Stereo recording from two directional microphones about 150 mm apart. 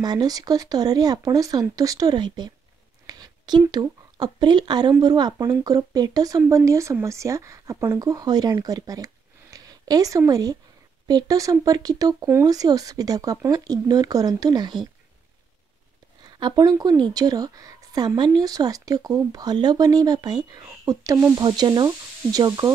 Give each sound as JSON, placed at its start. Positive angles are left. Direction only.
{"t": 0.0, "sound": "speech", "side_deg": -25}
{"t": 3.1, "sound": "a sound", "side_deg": -30}
{"t": 3.8, "sound": "speech", "side_deg": -30}
{"t": 16.3, "sound": "speech", "side_deg": -30}